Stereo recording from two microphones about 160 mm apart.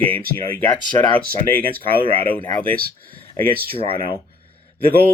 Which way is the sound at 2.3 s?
10° left (ahead or behind).